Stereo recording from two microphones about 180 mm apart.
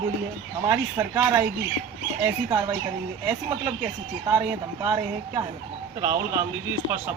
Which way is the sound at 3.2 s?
10° right (ahead or behind).